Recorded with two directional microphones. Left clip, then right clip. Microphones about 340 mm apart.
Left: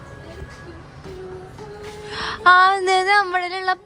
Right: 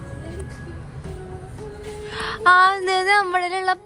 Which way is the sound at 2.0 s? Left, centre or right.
Centre.